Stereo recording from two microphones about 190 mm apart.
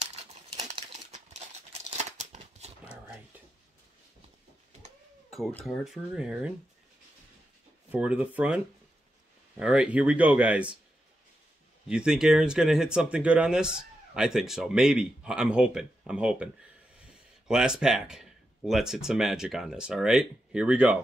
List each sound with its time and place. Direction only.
0.0 s crumpling: 35° right (ahead or behind)
5.3 s speech: 5° left (ahead or behind)
7.9 s speech: 5° right (ahead or behind)
9.6 s speech: 5° right (ahead or behind)
11.9 s speech: 5° right (ahead or behind)
17.5 s speech: 5° right (ahead or behind)